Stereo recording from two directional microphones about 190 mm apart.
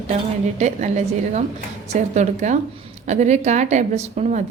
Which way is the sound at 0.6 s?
40° right (ahead or behind).